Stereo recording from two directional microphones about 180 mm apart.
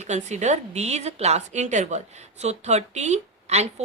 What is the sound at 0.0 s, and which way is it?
A woman's voice, 40° right (ahead or behind).